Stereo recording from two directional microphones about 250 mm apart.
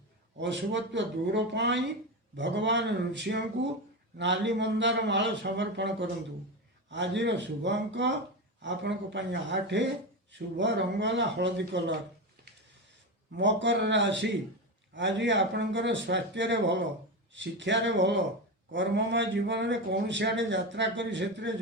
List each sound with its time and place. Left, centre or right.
0.3 s a man's voice: right
13.3 s a man's voice: right